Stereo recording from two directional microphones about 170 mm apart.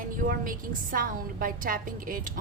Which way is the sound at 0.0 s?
55° right (ahead or behind).